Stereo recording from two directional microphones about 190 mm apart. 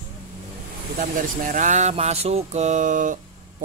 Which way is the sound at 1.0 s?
45° right (ahead or behind).